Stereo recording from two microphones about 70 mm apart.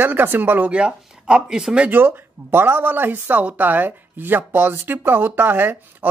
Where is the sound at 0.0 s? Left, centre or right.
Right; by 1.9 s centre.